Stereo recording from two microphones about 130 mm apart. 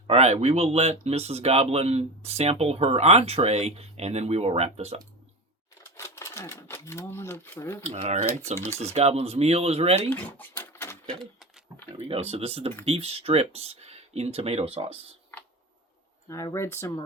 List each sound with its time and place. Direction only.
0.1 s speech: 55° right (ahead or behind)
5.8 s speech: 20° left (ahead or behind)
7.9 s speech: 55° right (ahead or behind)
8.5 s speech: 20° left (ahead or behind)
8.8 s speech: 55° right (ahead or behind)
10.1 s speech: 15° left (ahead or behind)
11.1 s a sound: centre (ahead or behind)
12.0 s speech: 45° right (ahead or behind)
16.3 s speech: 25° left (ahead or behind)